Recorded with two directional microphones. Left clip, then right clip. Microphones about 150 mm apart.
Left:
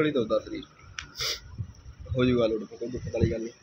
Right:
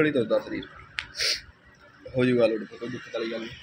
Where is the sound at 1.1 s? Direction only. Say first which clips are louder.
Right 5 dB; 20° left (ahead or behind).